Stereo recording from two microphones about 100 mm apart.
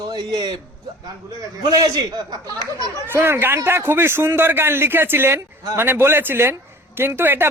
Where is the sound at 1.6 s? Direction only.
40° right (ahead or behind).